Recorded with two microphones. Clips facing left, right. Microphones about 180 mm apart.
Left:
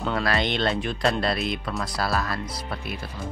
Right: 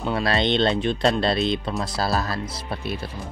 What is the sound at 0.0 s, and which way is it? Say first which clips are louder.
Speech: right 2 dB; 25° right (ahead or behind).